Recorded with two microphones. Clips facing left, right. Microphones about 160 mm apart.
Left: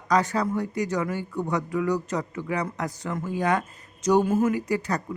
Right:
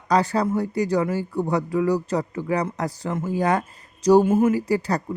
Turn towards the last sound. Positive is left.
turn(degrees=-30)  # may be behind; listen again after turning